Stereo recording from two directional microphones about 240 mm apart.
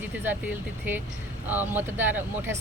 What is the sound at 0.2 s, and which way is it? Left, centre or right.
Speech, centre.